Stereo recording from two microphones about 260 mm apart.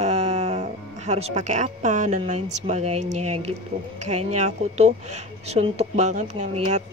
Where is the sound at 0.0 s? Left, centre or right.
Right.